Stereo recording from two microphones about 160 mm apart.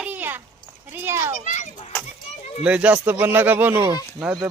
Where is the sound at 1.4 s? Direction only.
50° left (ahead or behind).